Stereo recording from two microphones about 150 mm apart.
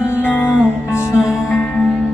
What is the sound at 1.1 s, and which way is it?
Music, 20° left (ahead or behind).